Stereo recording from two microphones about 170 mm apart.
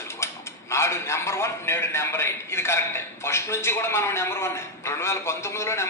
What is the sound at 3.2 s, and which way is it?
A man's voice, 15° left (ahead or behind).